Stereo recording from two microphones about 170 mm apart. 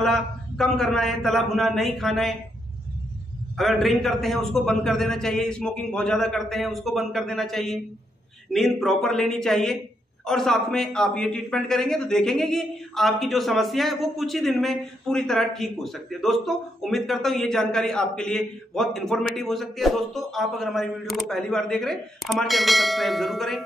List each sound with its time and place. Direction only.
0.0 s a man's voice: 5° left (ahead or behind)
3.5 s a man's voice: centre (ahead or behind)